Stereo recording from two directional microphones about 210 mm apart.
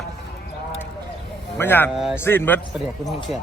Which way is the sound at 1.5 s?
10° left (ahead or behind).